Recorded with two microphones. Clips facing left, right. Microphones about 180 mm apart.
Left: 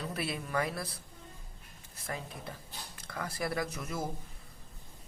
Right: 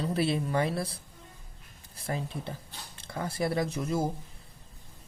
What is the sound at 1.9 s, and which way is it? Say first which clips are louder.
Speech: right 6 dB; 30° right (ahead or behind).